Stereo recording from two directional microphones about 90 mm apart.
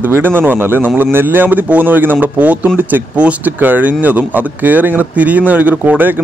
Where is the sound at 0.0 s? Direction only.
25° right (ahead or behind).